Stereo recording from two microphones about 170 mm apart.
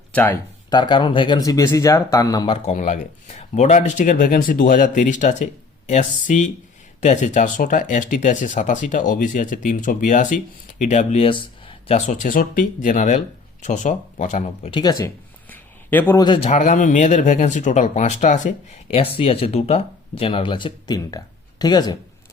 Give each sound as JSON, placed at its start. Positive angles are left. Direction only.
{"t": 0.1, "sound": "speech", "side_deg": 10}
{"t": 0.7, "sound": "speech", "side_deg": 25}
{"t": 2.6, "sound": "speech", "side_deg": 45}
{"t": 14.7, "sound": "speech", "side_deg": 25}
{"t": 15.4, "sound": "a sound", "side_deg": 10}
{"t": 16.1, "sound": "speech", "side_deg": 25}
{"t": 16.5, "sound": "speech", "side_deg": 45}
{"t": 18.9, "sound": "speech", "side_deg": 35}